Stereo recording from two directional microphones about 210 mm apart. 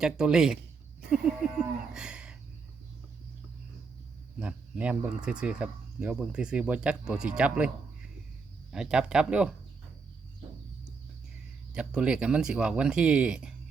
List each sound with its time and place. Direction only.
0.0 s speech: 5° right (ahead or behind)
1.1 s livestock: 5° right (ahead or behind)
4.4 s speech: 5° right (ahead or behind)
8.7 s speech: 5° right (ahead or behind)
11.7 s speech: 5° right (ahead or behind)